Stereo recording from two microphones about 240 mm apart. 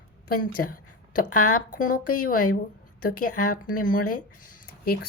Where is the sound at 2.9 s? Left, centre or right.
Left.